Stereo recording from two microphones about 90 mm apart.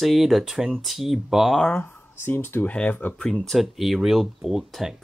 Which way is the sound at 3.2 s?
5° left (ahead or behind).